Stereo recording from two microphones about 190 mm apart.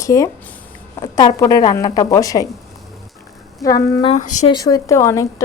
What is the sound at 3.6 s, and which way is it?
Speech, 20° left (ahead or behind).